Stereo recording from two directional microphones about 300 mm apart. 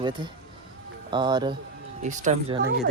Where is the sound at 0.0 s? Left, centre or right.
Centre.